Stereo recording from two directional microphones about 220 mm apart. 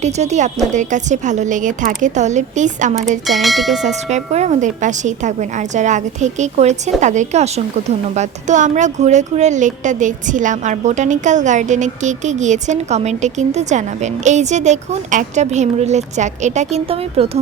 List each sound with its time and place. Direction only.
0.0 s a woman's voice: 30° right (ahead or behind)
3.2 s speech: centre (ahead or behind)
3.8 s a woman's voice: 30° right (ahead or behind)